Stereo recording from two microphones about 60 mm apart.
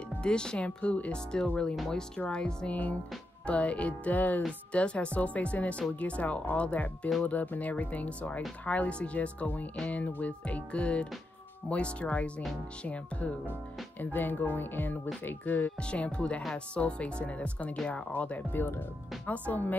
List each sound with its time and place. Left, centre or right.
0.2 s speech: centre
1.1 s speech: centre; by 15.7 s left
15.8 s speech: centre